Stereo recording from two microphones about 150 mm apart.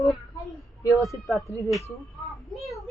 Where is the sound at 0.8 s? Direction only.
25° left (ahead or behind).